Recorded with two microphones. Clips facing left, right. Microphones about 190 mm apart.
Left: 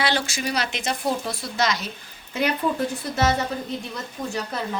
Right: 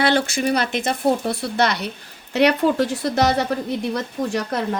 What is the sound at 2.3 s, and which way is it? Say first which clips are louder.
Speech: right 7 dB; 75° right (ahead or behind).